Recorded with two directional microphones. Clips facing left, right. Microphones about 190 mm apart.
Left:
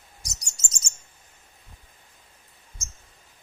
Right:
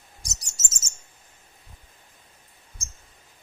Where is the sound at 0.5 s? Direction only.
5° right (ahead or behind).